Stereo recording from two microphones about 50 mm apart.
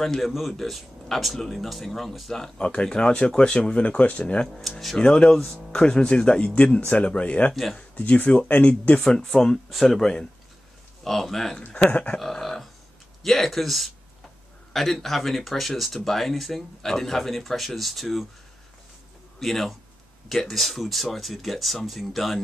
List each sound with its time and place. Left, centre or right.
0.0 s speech: centre
2.5 s speech: centre
4.5 s speech: centre
4.9 s speech: centre; by 9.0 s left
9.0 s speech: centre
11.7 s speech: left
12.2 s a sound: centre
13.2 s speech: centre
19.4 s speech: centre